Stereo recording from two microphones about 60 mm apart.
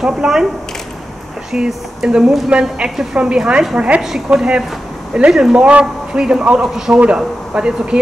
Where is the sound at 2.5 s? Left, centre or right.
Centre.